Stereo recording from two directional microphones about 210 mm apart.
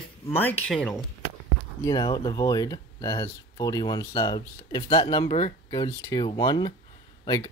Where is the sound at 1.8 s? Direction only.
20° left (ahead or behind).